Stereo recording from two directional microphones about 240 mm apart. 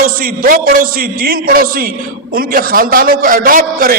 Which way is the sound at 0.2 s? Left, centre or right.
Right.